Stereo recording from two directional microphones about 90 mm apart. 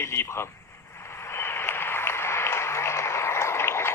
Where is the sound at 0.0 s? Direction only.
30° left (ahead or behind).